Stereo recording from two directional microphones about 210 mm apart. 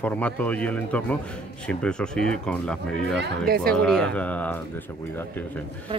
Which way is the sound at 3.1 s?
45° right (ahead or behind).